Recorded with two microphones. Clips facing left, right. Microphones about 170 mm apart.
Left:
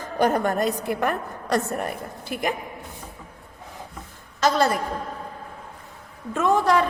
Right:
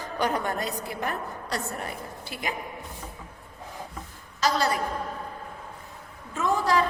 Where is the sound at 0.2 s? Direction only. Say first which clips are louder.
Left 7 dB; 50° left (ahead or behind).